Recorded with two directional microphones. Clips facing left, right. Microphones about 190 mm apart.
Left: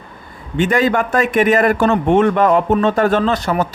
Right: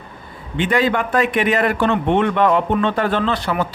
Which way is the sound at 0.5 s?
45° left (ahead or behind).